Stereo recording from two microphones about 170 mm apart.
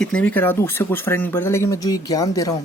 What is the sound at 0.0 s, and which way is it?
Speech, 5° left (ahead or behind).